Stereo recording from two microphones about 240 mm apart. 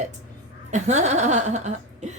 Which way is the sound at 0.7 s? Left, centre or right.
Right.